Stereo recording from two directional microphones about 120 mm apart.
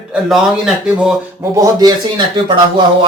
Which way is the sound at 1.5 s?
25° right (ahead or behind).